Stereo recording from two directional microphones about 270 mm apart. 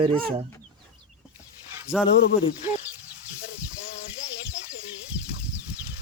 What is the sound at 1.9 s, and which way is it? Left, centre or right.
Speech, centre.